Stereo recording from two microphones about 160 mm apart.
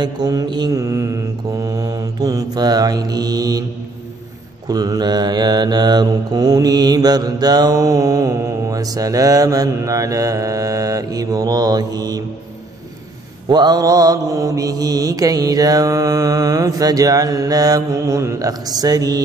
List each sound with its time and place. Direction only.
0.0 s mantra: 25° right (ahead or behind)
4.6 s mantra: 25° right (ahead or behind)
13.5 s mantra: 25° right (ahead or behind)